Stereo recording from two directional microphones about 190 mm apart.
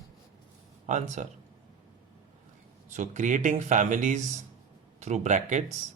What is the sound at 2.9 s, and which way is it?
Speech, 40° right (ahead or behind).